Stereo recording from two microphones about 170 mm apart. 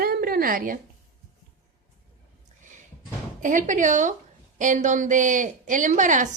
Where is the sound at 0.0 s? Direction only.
60° right (ahead or behind).